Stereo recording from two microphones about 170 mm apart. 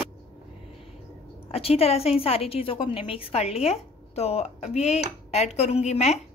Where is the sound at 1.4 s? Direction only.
35° left (ahead or behind).